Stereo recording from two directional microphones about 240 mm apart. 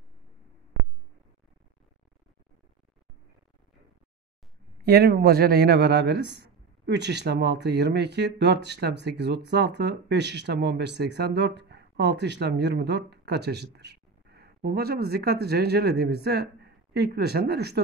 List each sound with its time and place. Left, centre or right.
4.8 s a man's voice: right